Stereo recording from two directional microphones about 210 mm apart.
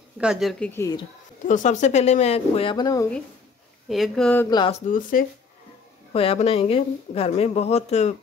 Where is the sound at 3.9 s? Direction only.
Centre (ahead or behind).